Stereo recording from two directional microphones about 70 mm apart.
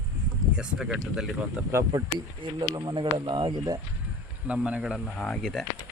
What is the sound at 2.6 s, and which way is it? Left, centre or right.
Speech, right.